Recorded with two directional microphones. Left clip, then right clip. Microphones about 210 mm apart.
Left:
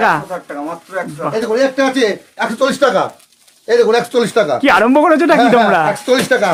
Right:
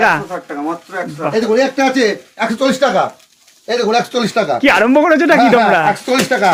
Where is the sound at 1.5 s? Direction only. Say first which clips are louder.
Even; 15° left (ahead or behind).